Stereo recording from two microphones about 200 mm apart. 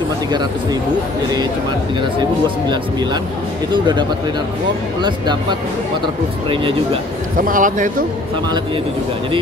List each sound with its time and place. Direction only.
2.7 s speech: 20° right (ahead or behind)
5.0 s speech: 20° right (ahead or behind)
7.3 s speech: 40° right (ahead or behind)